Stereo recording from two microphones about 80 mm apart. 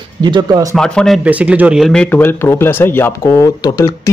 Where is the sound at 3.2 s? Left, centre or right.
Left.